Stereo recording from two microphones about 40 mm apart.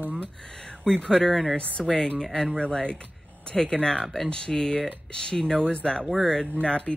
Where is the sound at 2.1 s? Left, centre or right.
Centre.